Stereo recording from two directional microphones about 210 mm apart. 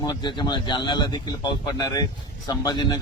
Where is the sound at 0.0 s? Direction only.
20° left (ahead or behind).